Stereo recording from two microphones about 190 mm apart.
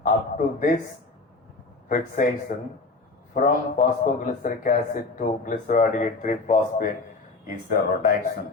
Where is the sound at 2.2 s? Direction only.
45° left (ahead or behind).